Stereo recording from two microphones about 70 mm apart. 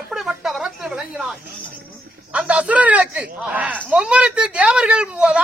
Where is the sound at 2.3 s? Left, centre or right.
Centre.